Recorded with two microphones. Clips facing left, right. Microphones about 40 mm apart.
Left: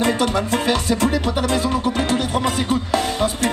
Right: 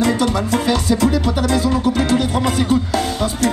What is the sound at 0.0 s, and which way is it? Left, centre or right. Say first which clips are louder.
Music: right 2 dB; left.